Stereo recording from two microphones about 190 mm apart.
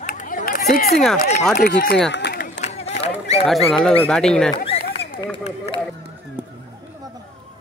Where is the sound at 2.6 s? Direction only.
35° left (ahead or behind).